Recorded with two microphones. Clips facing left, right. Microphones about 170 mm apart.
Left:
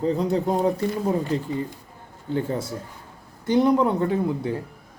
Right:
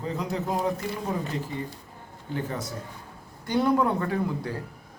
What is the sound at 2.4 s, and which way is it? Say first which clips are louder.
Speech: left 5 dB; 30° left (ahead or behind).